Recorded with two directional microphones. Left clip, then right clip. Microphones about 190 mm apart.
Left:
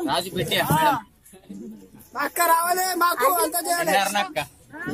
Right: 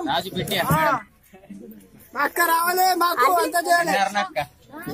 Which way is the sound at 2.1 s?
35° right (ahead or behind).